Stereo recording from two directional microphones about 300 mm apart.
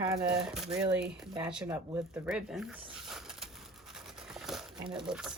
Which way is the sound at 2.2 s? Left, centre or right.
Centre.